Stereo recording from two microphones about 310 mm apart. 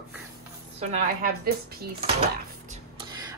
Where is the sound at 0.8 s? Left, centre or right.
Right.